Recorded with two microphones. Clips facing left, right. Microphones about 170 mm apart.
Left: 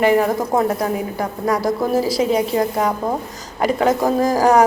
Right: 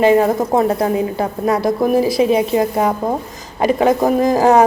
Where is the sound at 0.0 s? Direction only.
20° right (ahead or behind).